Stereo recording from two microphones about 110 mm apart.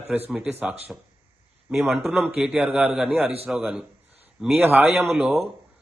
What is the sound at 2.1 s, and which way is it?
A man's voice, centre (ahead or behind).